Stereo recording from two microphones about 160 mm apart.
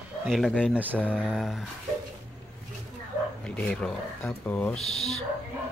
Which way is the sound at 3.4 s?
5° left (ahead or behind).